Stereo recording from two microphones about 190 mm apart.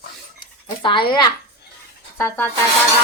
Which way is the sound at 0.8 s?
25° left (ahead or behind).